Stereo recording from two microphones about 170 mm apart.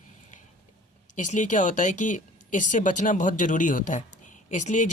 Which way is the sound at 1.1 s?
45° left (ahead or behind).